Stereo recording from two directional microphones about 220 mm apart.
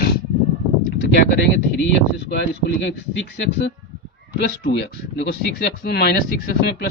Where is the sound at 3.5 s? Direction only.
50° left (ahead or behind).